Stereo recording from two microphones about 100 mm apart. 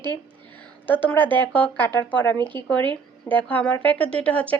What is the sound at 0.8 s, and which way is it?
A woman's voice, 20° left (ahead or behind).